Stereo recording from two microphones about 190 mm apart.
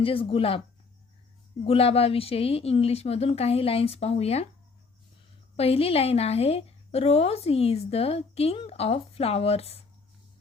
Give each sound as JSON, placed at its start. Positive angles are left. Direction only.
{"t": 0.0, "sound": "speech", "side_deg": 30}
{"t": 1.6, "sound": "a woman's voice", "side_deg": 30}
{"t": 5.5, "sound": "a woman's voice", "side_deg": 30}